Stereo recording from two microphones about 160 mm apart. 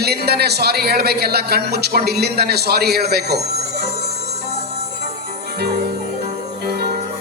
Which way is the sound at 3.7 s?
40° right (ahead or behind).